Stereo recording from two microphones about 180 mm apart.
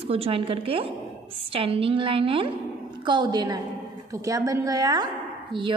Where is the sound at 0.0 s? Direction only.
35° right (ahead or behind).